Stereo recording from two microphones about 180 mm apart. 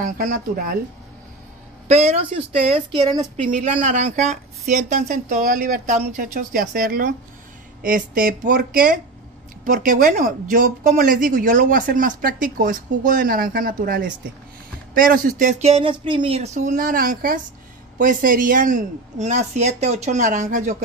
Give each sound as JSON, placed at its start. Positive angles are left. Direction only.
{"t": 0.0, "sound": "speech", "side_deg": -45}
{"t": 1.9, "sound": "speech", "side_deg": -35}
{"t": 3.8, "sound": "speech", "side_deg": -40}